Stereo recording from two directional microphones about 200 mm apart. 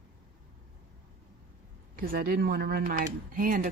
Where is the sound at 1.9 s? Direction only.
45° right (ahead or behind).